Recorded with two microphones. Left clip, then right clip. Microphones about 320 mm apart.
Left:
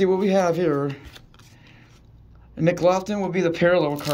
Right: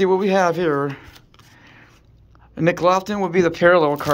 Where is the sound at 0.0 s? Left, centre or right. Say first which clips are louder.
Right 3 dB; centre.